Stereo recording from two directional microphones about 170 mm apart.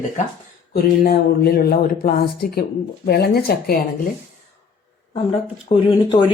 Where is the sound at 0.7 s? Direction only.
65° left (ahead or behind).